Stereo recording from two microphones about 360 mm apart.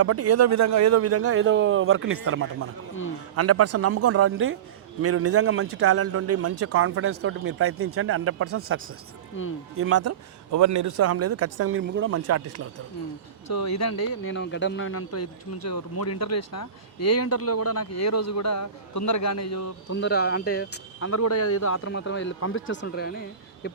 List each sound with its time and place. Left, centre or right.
0.0 s a man's voice: right
13.5 s speech: left
20.0 s speech: left
20.5 s speech: left
23.6 s a sound: left